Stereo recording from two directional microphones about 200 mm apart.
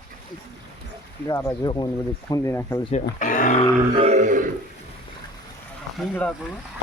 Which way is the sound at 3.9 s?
30° right (ahead or behind).